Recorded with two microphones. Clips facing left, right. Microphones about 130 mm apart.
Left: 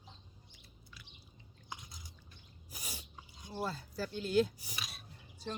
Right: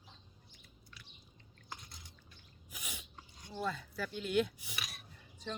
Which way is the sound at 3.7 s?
35° left (ahead or behind).